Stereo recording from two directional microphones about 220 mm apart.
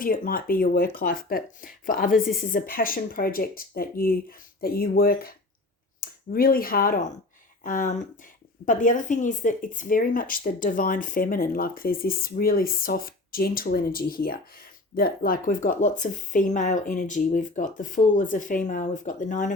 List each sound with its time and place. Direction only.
0.0 s speech: 40° left (ahead or behind)